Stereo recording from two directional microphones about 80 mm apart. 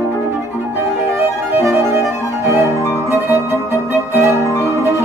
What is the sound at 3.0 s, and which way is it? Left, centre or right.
Music, right.